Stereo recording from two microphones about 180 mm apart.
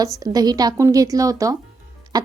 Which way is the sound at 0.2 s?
20° right (ahead or behind).